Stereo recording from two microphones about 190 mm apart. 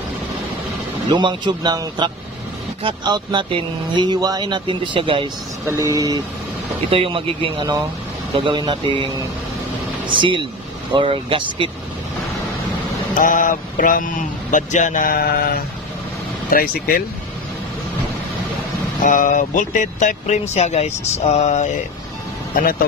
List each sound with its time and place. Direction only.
1.0 s speech: 25° right (ahead or behind)
5.7 s speech: 15° right (ahead or behind)
13.1 s a man's voice: 45° left (ahead or behind)
19.0 s a man's voice: 45° left (ahead or behind)